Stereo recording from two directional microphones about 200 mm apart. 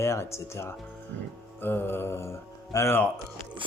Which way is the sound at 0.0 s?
15° left (ahead or behind).